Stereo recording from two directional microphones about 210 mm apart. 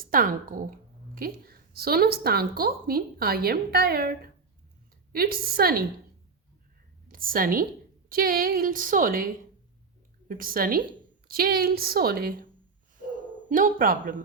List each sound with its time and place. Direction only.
0.0 s a woman's voice: 40° right (ahead or behind)
7.1 s a woman's voice: 40° right (ahead or behind)
13.5 s speech: 40° right (ahead or behind)